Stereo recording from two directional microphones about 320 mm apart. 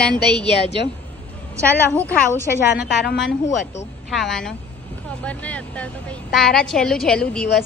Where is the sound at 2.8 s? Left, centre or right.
Left.